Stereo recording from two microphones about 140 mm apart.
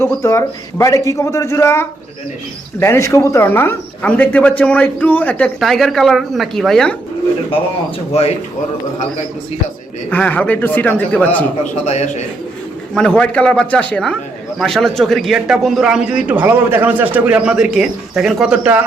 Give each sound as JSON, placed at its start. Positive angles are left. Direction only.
{"t": 0.0, "sound": "a man's voice", "side_deg": 20}
{"t": 5.5, "sound": "a man's voice", "side_deg": 0}
{"t": 10.1, "sound": "speech", "side_deg": 10}
{"t": 11.6, "sound": "a man's voice", "side_deg": 55}
{"t": 12.9, "sound": "a man's voice", "side_deg": 5}